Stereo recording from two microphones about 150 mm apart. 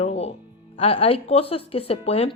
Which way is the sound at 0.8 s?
40° left (ahead or behind).